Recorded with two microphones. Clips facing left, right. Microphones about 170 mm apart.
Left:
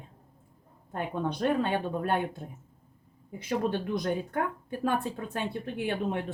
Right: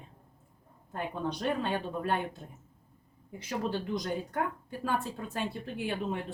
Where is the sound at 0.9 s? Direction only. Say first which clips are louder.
Left 3 dB; 60° left (ahead or behind).